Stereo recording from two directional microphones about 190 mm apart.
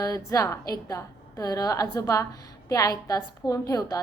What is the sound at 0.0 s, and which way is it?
A woman's voice, 15° left (ahead or behind).